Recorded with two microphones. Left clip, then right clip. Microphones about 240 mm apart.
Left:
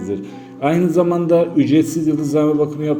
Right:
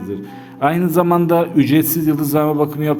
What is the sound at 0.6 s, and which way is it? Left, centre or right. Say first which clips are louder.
A man's voice: even; right.